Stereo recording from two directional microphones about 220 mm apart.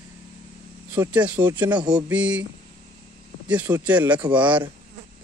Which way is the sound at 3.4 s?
10° right (ahead or behind).